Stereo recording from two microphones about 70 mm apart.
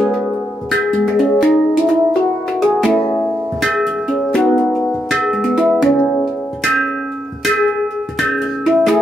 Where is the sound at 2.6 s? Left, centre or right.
Centre.